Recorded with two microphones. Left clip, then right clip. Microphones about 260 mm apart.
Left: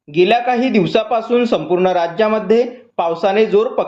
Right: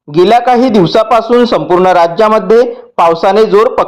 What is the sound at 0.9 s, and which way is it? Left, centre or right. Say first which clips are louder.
A man's voice: right 8 dB; right.